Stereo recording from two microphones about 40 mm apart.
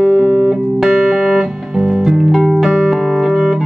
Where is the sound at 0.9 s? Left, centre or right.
Right.